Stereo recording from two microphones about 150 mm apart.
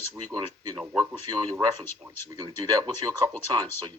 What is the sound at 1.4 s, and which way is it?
Speech, 20° right (ahead or behind).